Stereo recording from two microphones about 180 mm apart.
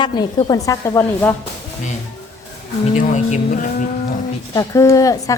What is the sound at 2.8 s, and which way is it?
Speech, 40° left (ahead or behind).